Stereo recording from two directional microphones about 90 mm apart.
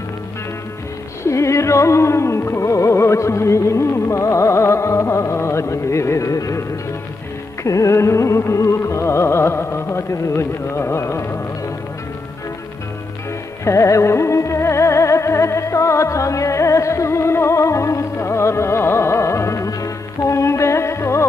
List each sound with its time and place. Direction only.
1.2 s music: 35° left (ahead or behind)
7.6 s music: 35° left (ahead or behind)
13.7 s music: 35° left (ahead or behind)